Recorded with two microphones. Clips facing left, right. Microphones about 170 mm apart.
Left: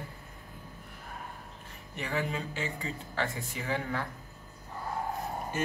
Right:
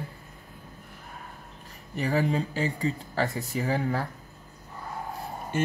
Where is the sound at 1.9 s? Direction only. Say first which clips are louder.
Right 8 dB; 40° right (ahead or behind).